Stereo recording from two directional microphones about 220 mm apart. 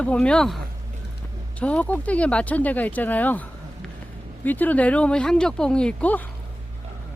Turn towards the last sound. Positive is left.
turn(degrees=5)  # may be behind; listen again after turning